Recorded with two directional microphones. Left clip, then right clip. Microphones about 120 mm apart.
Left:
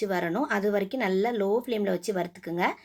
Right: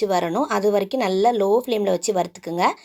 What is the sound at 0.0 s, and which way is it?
Speech, 40° right (ahead or behind).